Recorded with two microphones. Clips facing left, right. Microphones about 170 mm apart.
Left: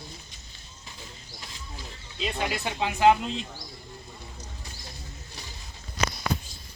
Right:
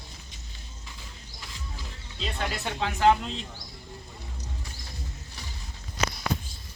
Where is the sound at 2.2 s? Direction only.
10° left (ahead or behind).